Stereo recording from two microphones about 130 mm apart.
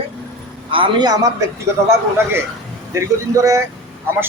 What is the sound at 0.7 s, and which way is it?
Speech, 40° right (ahead or behind).